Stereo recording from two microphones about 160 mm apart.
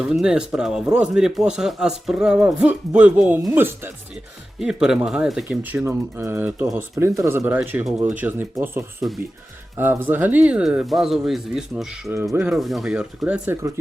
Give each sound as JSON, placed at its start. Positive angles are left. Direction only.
{"t": 0.0, "sound": "speech", "side_deg": -5}
{"t": 12.1, "sound": "speech", "side_deg": -15}
{"t": 12.5, "sound": "speech", "side_deg": 0}